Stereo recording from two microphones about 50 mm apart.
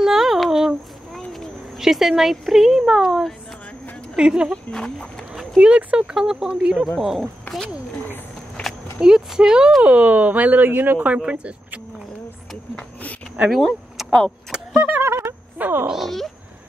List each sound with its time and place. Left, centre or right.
0.0 s a sound: centre
1.8 s speech: centre
4.6 s speech: centre
5.6 s speech: right; by 7.2 s centre
9.0 s speech: centre
9.8 s speech: right
11.2 s speech: right
12.7 s a sound: left
13.5 s speech: centre
14.5 s keys jangling: centre
15.0 s a sound: right
15.6 s a sound: right